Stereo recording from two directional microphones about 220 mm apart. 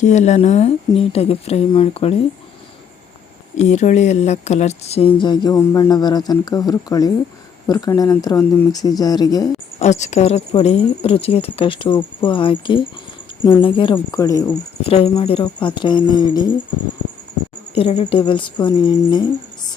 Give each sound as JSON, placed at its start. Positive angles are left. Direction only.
{"t": 0.0, "sound": "speech", "side_deg": 30}
{"t": 3.6, "sound": "speech", "side_deg": 30}
{"t": 9.8, "sound": "speech", "side_deg": 30}
{"t": 14.8, "sound": "speech", "side_deg": 25}
{"t": 17.7, "sound": "speech", "side_deg": 30}